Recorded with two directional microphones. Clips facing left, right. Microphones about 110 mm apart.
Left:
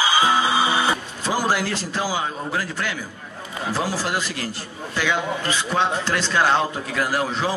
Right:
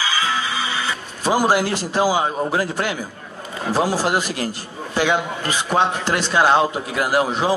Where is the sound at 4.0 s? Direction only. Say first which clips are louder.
Right 5 dB; 15° right (ahead or behind).